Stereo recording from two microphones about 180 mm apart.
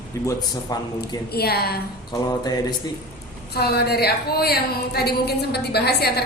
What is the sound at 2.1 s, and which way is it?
Speech, 20° left (ahead or behind).